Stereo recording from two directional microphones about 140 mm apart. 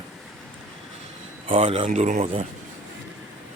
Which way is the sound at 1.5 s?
45° right (ahead or behind).